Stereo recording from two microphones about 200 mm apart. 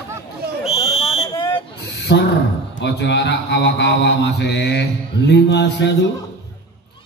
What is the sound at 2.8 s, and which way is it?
Mantra, 60° left (ahead or behind).